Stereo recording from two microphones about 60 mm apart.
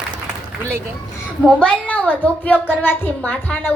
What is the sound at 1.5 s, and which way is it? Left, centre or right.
A woman's voice, centre.